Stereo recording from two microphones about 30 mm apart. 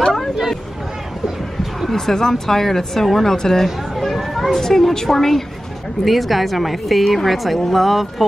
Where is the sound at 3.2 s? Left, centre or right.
Centre.